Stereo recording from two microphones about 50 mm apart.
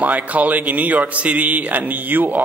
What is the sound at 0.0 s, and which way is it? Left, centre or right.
A man's voice, right.